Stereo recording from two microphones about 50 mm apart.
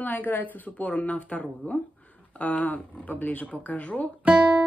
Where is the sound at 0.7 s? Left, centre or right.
Left.